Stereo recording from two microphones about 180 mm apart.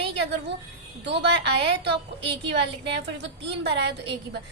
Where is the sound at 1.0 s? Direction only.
70° right (ahead or behind).